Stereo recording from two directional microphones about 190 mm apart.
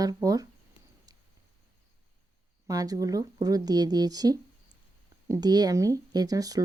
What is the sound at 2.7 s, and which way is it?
Speech, 20° right (ahead or behind).